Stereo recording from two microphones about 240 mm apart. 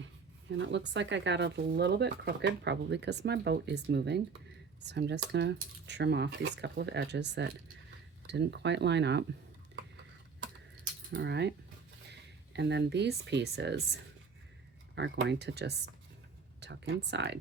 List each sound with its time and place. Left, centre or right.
0.5 s speech: right
11.1 s speech: right
14.9 s speech: right